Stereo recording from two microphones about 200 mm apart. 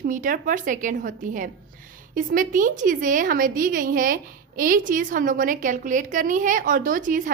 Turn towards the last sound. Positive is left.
turn(degrees=-40)  # may be behind; listen again after turning